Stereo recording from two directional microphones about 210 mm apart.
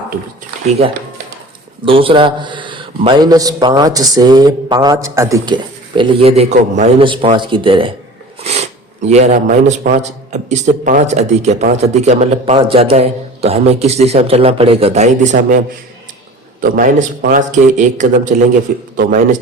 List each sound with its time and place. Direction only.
1.8 s a man's voice: 25° right (ahead or behind)
7.0 s a man's voice: 25° right (ahead or behind)
16.6 s speech: 40° right (ahead or behind)